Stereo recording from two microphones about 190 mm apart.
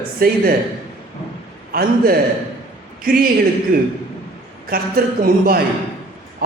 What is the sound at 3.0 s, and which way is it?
A man's voice, 50° right (ahead or behind).